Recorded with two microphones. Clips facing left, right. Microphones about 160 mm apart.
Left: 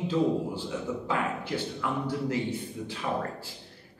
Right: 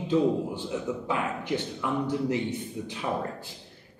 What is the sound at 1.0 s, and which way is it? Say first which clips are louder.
Speech: right 1 dB; 20° right (ahead or behind).